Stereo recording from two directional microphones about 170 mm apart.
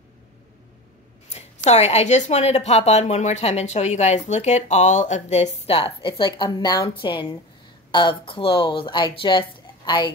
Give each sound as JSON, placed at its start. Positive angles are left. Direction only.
{"t": 1.3, "sound": "speech", "side_deg": 40}